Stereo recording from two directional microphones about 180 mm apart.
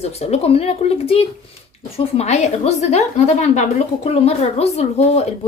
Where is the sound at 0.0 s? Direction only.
35° left (ahead or behind).